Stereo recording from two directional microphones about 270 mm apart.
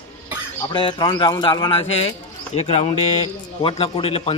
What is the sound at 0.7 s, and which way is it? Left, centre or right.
A man's voice, centre.